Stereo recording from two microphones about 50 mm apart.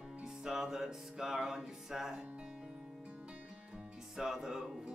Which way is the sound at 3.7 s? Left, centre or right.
Centre.